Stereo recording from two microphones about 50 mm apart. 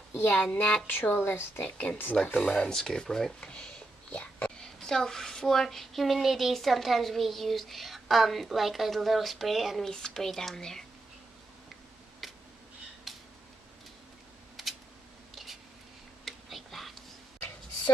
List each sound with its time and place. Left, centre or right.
0.3 s speech: left
0.8 s a woman's voice: left
1.8 s speech: left
2.3 s speech: left
2.7 s speech: centre
4.1 s whispering: left
4.6 s a woman's voice: centre
9.8 s speech: centre
12.2 s scissors: centre
13.1 s a sound: centre
16.3 s whispering: centre